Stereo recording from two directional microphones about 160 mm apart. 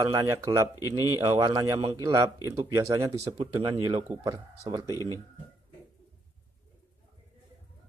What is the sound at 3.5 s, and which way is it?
Speech, 25° right (ahead or behind).